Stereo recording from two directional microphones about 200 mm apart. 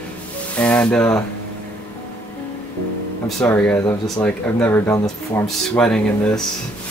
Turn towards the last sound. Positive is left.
turn(degrees=5)  # may be behind; listen again after turning